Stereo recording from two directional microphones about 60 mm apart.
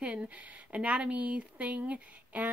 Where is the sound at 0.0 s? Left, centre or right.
Right.